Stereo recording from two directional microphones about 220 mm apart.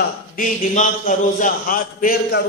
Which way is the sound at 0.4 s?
35° left (ahead or behind).